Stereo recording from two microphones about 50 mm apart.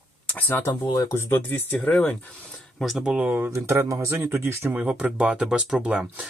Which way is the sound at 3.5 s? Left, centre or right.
Right.